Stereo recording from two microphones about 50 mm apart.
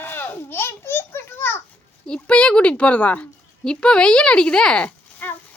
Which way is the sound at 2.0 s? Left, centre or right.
Centre.